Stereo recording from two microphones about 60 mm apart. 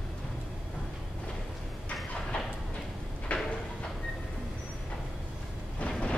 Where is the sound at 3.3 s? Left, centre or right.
Left.